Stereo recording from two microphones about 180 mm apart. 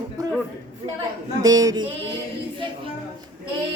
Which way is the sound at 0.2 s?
20° right (ahead or behind).